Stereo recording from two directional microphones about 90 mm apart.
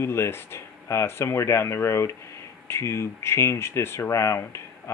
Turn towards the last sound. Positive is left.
turn(degrees=30)  # may be behind; listen again after turning